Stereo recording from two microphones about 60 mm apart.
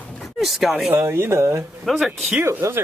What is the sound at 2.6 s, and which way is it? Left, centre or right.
Speech, right.